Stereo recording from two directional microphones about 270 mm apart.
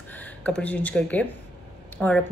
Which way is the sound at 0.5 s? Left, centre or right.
Centre.